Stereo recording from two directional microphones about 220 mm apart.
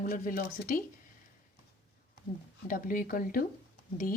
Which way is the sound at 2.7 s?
40° left (ahead or behind).